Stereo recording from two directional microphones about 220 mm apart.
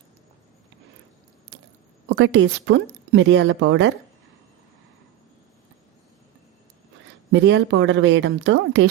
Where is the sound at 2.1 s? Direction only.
55° right (ahead or behind).